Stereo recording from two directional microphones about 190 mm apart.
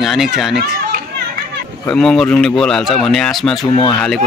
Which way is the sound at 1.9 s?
Centre (ahead or behind).